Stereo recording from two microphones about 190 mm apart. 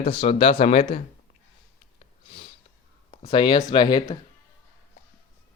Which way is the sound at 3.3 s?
25° left (ahead or behind).